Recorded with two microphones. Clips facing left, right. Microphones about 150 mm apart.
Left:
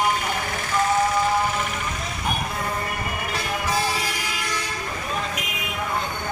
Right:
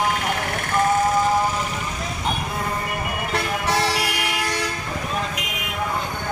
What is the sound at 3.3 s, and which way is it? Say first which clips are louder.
Vehicle: right 3 dB; 80° right.